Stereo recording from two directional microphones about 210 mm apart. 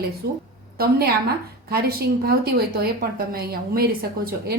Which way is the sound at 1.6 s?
45° right (ahead or behind).